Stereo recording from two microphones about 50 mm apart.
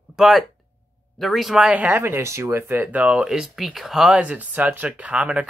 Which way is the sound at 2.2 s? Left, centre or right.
Right.